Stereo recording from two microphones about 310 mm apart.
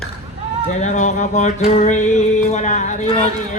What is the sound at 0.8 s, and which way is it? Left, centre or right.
Music, left.